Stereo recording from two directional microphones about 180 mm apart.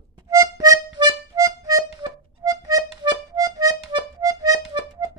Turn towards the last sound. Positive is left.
turn(degrees=-20)  # may be behind; listen again after turning